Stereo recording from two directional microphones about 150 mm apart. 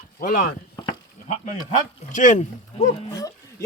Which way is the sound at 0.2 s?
65° left (ahead or behind).